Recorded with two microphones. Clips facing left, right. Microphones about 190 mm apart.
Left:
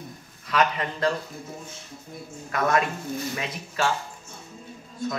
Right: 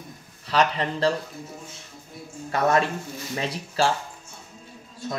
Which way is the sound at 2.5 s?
30° right (ahead or behind).